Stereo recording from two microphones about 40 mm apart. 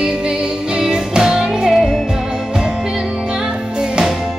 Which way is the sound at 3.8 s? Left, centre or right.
Right.